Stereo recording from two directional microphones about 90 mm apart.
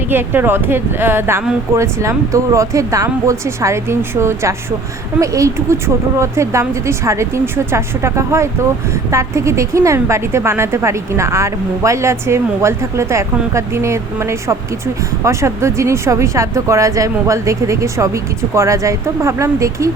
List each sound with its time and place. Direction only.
0.1 s a woman's voice: 25° right (ahead or behind)